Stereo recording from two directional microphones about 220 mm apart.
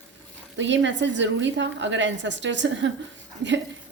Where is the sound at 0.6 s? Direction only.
55° right (ahead or behind).